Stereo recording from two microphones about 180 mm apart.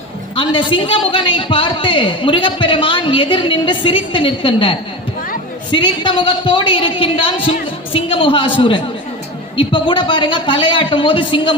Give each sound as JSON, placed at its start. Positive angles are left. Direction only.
{"t": 0.3, "sound": "a man's voice", "side_deg": 30}